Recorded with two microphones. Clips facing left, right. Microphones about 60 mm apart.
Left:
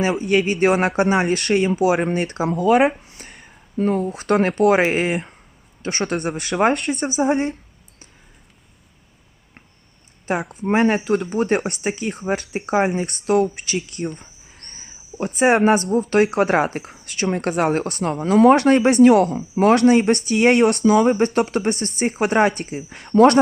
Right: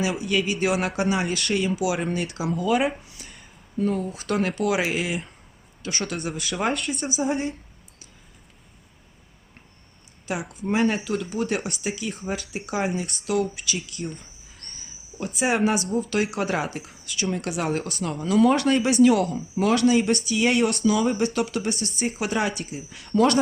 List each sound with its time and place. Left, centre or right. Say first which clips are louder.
0.0 s speech: left 6 dB; left
1.7 s speech: left 7 dB; left
3.0 s a sound: left 3 dB; left
3.3 s speech: left 4 dB; left
10.5 s speech: left 5 dB; left
14.2 s a sound: left 3 dB; left
16.0 s speech: left 8 dB; left